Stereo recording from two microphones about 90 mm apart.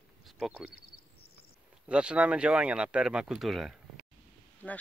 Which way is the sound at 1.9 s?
10° right (ahead or behind).